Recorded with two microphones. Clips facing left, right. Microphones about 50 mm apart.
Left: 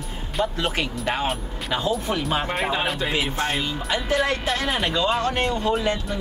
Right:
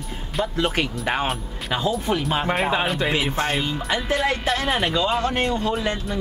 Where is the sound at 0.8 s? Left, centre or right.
Right.